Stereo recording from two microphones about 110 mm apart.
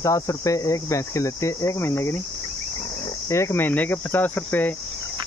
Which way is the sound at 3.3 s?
25° left (ahead or behind).